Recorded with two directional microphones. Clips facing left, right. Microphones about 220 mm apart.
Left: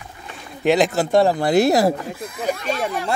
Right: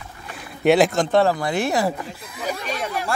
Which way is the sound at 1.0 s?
15° left (ahead or behind).